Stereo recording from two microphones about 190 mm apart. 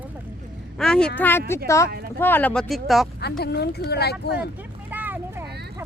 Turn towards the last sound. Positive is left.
turn(degrees=-10)  # may be behind; listen again after turning